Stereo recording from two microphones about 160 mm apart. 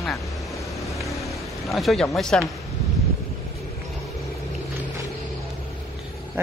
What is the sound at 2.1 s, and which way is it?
Speech, centre (ahead or behind).